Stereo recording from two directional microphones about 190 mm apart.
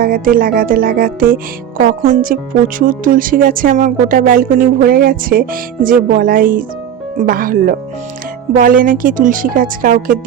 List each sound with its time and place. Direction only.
0.0 s speech: 50° right (ahead or behind)